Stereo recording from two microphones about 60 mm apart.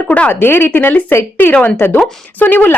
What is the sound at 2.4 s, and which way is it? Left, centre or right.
Speech, left.